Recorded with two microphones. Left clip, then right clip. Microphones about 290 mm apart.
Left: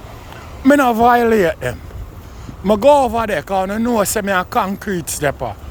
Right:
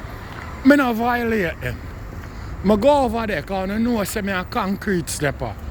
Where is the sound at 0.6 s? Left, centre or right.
Centre.